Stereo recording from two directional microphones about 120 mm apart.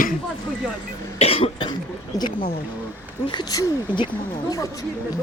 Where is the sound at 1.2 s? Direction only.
50° left (ahead or behind).